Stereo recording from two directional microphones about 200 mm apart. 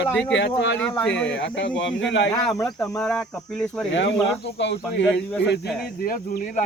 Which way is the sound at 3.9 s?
65° left (ahead or behind).